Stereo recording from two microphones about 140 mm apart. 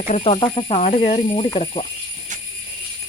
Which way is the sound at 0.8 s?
65° left (ahead or behind).